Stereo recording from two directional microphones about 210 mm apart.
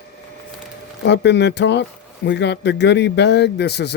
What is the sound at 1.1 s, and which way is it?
Speech, 55° left (ahead or behind).